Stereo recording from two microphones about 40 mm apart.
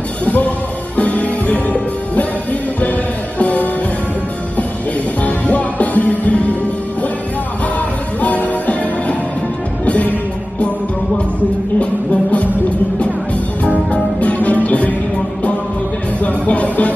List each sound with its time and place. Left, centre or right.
0.2 s music: left
5.2 s music: left
8.2 s music: left
11.8 s music: left
13.7 s music: left
16.2 s music: left